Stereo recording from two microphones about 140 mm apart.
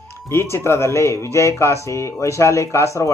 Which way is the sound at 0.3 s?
20° left (ahead or behind).